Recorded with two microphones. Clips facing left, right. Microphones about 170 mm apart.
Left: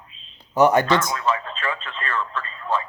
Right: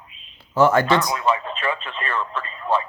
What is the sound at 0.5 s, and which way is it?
Speech, 20° left (ahead or behind).